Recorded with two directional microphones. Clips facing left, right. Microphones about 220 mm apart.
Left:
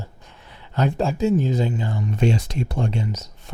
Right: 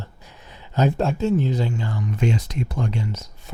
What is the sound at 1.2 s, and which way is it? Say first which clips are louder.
Speech: left 1 dB; 10° left (ahead or behind).